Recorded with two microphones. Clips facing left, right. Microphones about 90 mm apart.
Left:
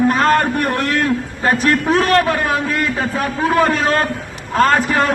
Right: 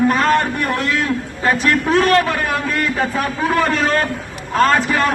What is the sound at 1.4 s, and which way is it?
A man's voice, 35° left (ahead or behind).